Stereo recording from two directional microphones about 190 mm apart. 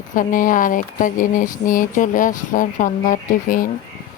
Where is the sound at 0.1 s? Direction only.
45° left (ahead or behind).